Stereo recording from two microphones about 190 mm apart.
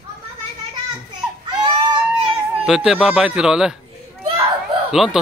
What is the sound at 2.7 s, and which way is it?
Speech, centre (ahead or behind).